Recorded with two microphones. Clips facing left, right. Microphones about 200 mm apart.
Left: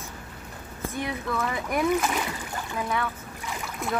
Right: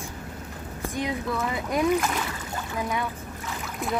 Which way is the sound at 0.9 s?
15° right (ahead or behind).